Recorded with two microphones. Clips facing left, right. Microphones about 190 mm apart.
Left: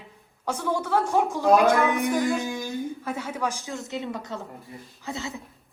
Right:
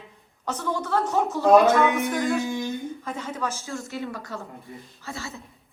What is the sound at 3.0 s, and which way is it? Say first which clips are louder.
A woman's voice: left 1 dB; 10° left (ahead or behind).